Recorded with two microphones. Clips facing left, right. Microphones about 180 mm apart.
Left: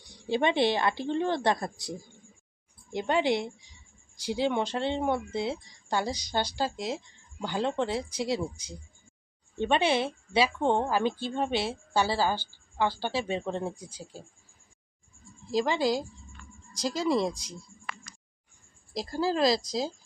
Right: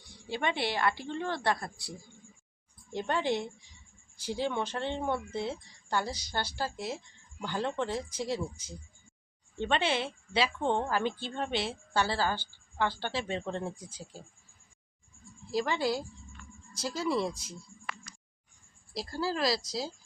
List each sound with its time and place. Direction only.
0.3 s a woman's voice: 20° left (ahead or behind)
2.9 s a woman's voice: 15° left (ahead or behind)
15.5 s a woman's voice: 15° left (ahead or behind)
18.9 s a woman's voice: 15° left (ahead or behind)